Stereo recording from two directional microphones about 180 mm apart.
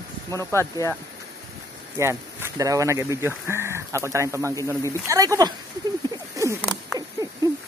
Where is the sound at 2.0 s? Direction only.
15° right (ahead or behind).